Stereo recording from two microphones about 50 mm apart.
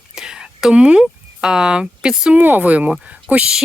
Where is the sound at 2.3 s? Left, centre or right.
Right.